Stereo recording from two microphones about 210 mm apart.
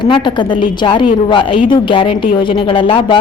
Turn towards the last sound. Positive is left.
turn(degrees=25)  # may be behind; listen again after turning